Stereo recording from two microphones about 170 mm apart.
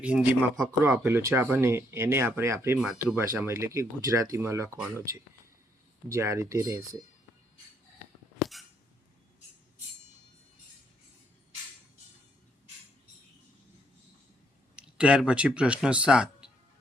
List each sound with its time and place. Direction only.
0.0 s speech: 10° right (ahead or behind)
2.7 s speech: 5° right (ahead or behind)
3.2 s speech: 15° right (ahead or behind)
6.1 s speech: 15° right (ahead or behind)
8.4 s a sound: centre (ahead or behind)
14.8 s speech: 5° right (ahead or behind)